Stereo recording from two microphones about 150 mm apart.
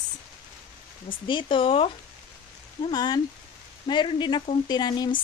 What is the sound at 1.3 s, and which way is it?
Speech, 35° left (ahead or behind).